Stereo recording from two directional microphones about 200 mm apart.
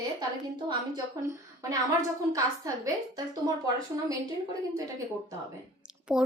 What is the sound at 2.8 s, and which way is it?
Speech, 20° right (ahead or behind).